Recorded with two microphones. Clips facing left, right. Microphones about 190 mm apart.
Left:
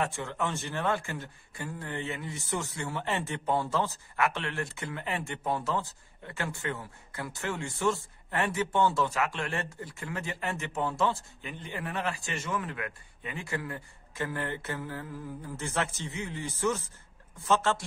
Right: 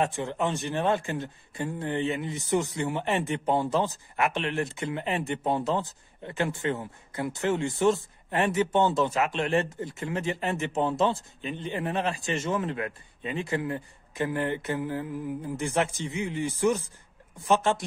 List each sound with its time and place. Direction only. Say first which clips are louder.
0.0 s speech: right 4 dB; 20° right (ahead or behind)